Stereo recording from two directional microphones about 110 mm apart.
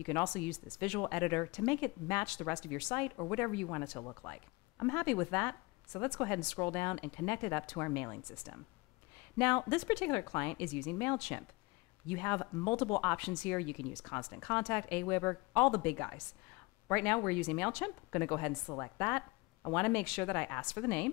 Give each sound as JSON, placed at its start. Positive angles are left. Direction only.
{"t": 0.0, "sound": "speech", "side_deg": 15}